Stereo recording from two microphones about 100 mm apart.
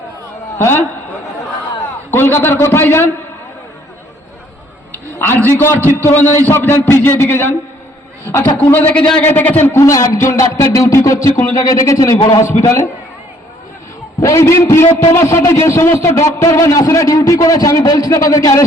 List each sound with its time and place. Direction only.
0.6 s a man's voice: 20° left (ahead or behind)
2.0 s a man's voice: 20° left (ahead or behind)
5.5 s a man's voice: 20° left (ahead or behind)
8.5 s a man's voice: 15° left (ahead or behind)
14.2 s a man's voice: 30° left (ahead or behind)